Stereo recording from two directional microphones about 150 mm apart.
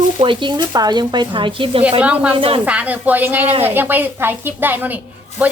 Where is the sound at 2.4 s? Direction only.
40° right (ahead or behind).